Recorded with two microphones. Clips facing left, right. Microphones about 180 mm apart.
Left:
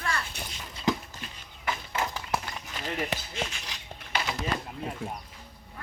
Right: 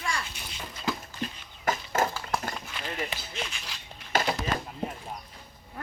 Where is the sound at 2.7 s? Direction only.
45° left (ahead or behind).